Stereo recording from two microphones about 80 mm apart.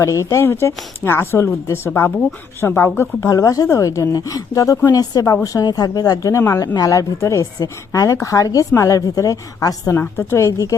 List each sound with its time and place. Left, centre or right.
0.0 s speech: left
1.9 s a woman's voice: left
6.3 s speech: left
6.7 s a woman's voice: left
9.9 s speech: left